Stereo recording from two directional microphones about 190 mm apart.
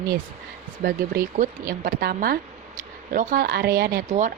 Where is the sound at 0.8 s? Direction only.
55° right (ahead or behind).